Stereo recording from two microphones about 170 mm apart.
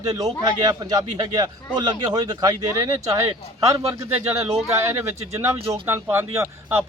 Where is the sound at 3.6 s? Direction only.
20° right (ahead or behind).